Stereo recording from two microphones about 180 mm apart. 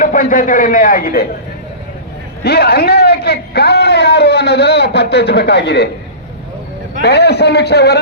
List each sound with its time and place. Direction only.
0.0 s a man's voice: 45° left (ahead or behind)
2.4 s a man's voice: 60° left (ahead or behind)
7.0 s a man's voice: 65° left (ahead or behind)